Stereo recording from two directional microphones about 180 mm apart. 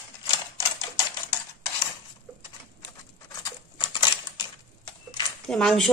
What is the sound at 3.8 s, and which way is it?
Typewriter, 25° left (ahead or behind).